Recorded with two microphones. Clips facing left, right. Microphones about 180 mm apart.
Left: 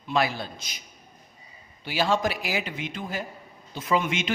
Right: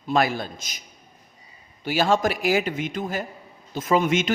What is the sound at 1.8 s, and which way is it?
Speech, 45° right (ahead or behind).